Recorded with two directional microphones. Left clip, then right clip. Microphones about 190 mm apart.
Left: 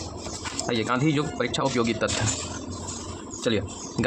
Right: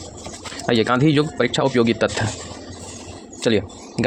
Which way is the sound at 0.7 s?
35° right (ahead or behind).